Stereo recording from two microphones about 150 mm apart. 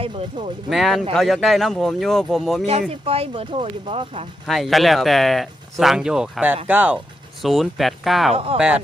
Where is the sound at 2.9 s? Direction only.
40° right (ahead or behind).